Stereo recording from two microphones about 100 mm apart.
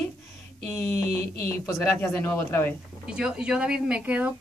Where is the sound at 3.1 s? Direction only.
10° right (ahead or behind).